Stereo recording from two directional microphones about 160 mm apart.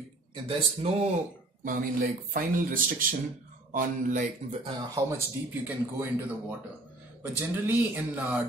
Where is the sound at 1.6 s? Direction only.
60° right (ahead or behind).